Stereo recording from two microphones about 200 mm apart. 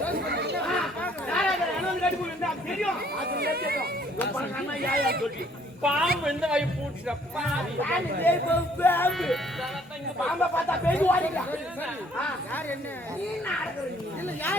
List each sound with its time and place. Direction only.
0.3 s chatter: 55° right (ahead or behind)
1.0 s a sound: 5° left (ahead or behind)
2.4 s speech: centre (ahead or behind)
3.2 s speech: 50° right (ahead or behind)
4.9 s speech: 50° right (ahead or behind)
5.8 s a man's voice: 5° right (ahead or behind)
7.8 s speech: 10° left (ahead or behind)